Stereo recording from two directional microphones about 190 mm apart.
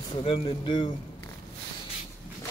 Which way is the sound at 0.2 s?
30° left (ahead or behind).